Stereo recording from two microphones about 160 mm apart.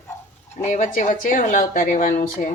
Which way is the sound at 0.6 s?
50° left (ahead or behind).